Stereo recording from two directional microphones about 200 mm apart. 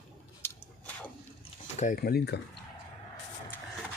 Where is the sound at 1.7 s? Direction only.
45° left (ahead or behind).